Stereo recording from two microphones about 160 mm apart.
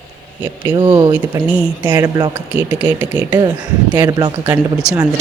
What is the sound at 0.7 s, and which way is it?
Speech, 25° right (ahead or behind).